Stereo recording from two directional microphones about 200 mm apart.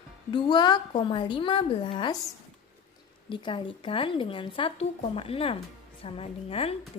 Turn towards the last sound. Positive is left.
turn(degrees=30)  # may be behind; listen again after turning